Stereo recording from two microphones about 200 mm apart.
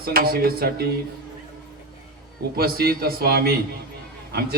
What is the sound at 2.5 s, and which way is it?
A man's voice, 50° right (ahead or behind).